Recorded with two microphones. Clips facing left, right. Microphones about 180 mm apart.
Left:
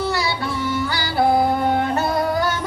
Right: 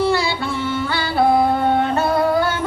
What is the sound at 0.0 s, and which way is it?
Yodeling, 25° right (ahead or behind).